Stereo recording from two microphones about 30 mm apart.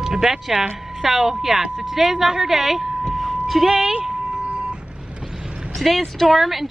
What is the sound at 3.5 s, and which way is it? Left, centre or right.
Speech, centre.